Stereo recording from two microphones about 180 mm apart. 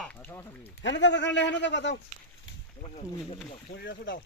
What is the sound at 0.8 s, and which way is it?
A man's voice, 80° left.